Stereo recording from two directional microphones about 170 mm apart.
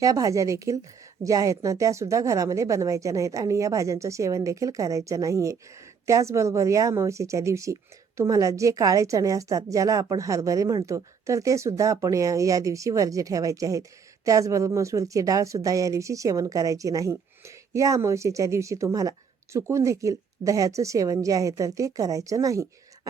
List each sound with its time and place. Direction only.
0.0 s speech: 20° right (ahead or behind)